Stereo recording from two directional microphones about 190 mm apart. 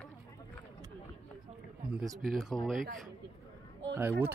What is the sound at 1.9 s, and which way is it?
Speech, centre (ahead or behind).